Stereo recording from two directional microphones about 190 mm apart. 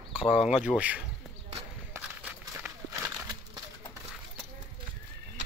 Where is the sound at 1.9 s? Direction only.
5° right (ahead or behind).